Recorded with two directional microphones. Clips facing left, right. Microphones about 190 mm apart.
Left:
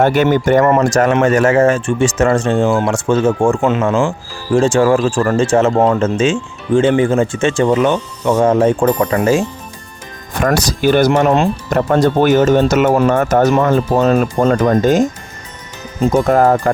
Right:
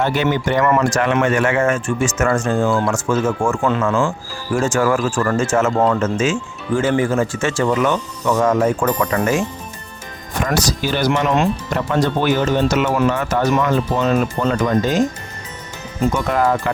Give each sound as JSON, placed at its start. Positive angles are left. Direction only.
{"t": 0.0, "sound": "speech", "side_deg": 50}
{"t": 0.6, "sound": "speech", "side_deg": 35}
{"t": 10.4, "sound": "speech", "side_deg": 55}
{"t": 11.1, "sound": "speech", "side_deg": 40}
{"t": 16.1, "sound": "speech", "side_deg": 45}